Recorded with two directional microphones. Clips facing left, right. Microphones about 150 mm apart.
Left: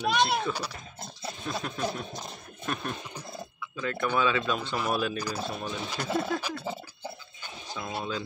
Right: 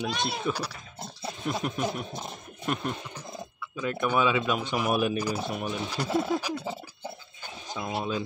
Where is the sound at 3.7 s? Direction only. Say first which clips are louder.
Right 2 dB; 15° right (ahead or behind).